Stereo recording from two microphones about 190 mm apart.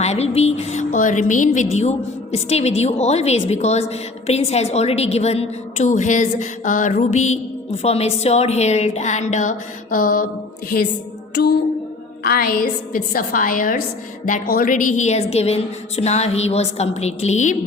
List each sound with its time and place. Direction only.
0.0 s music: 35° left (ahead or behind)
12.2 s a woman's voice: 50° left (ahead or behind)
14.3 s music: 45° left (ahead or behind)